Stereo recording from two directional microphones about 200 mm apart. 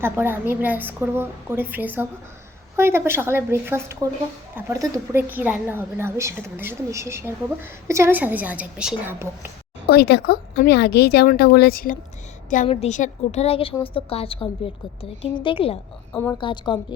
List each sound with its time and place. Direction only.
0.0 s a woman's voice: 10° right (ahead or behind)
9.9 s speech: 50° left (ahead or behind)
12.6 s a woman's voice: 30° left (ahead or behind)